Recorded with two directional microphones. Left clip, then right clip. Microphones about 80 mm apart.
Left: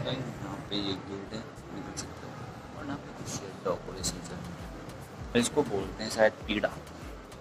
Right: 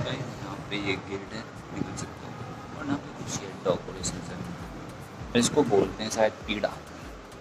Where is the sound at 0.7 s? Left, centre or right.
Right.